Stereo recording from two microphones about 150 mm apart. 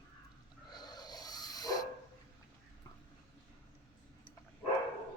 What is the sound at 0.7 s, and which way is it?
Dog, 25° left (ahead or behind).